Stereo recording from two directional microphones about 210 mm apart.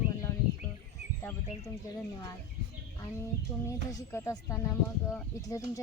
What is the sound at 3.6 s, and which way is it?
Speech, 15° left (ahead or behind).